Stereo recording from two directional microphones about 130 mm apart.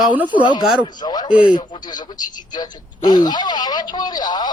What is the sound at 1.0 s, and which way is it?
Speech, 30° left (ahead or behind).